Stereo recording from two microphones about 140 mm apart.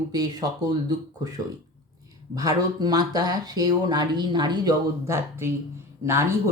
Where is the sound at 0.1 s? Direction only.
30° right (ahead or behind).